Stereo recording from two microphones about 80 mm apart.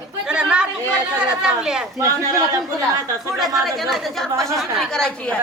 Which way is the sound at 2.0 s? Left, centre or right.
Right.